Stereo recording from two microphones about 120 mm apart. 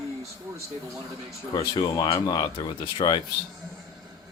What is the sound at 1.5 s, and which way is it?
Speech, 35° left (ahead or behind).